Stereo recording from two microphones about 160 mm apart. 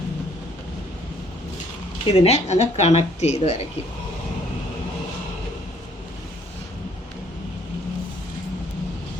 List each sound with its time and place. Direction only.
2.0 s speech: 40° left (ahead or behind)